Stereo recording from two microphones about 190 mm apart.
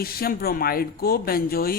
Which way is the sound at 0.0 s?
50° left (ahead or behind).